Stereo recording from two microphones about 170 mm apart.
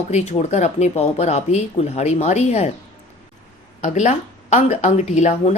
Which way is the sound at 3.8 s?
45° left (ahead or behind).